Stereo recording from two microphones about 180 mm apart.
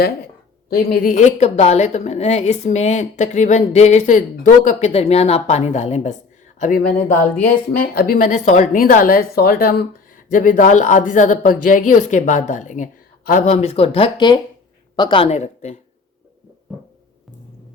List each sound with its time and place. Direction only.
0.8 s a woman's voice: 45° left (ahead or behind)